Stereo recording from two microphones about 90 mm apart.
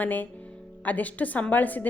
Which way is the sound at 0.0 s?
20° left (ahead or behind).